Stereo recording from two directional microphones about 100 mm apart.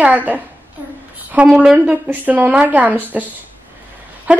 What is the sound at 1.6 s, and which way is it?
A woman's voice, 15° right (ahead or behind).